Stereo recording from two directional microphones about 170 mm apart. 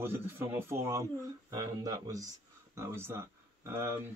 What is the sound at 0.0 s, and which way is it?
Speech, 15° right (ahead or behind).